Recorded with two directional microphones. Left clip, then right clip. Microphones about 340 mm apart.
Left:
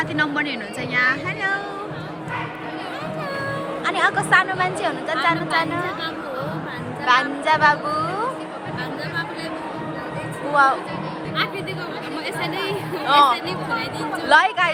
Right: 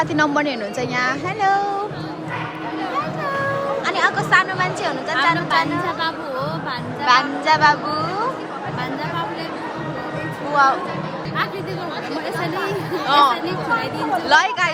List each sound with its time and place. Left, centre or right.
0.0 s a woman's voice: centre
3.8 s a woman's voice: centre
7.0 s a woman's voice: centre
10.5 s a woman's voice: centre
13.1 s a woman's voice: centre